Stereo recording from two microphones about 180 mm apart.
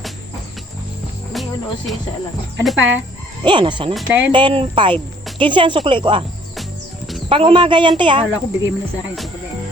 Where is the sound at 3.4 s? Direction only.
25° right (ahead or behind).